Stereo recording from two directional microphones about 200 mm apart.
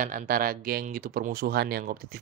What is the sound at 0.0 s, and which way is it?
Speech, 45° right (ahead or behind).